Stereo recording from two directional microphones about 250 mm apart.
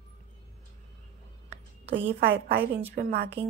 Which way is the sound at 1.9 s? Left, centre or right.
Right.